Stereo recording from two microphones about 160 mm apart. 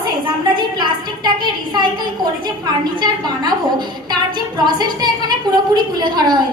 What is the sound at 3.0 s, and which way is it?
A woman's voice, 25° right (ahead or behind).